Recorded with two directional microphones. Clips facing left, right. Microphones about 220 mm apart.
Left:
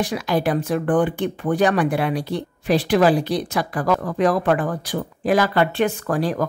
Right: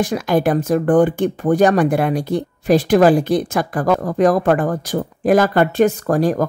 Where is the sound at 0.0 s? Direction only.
50° right (ahead or behind).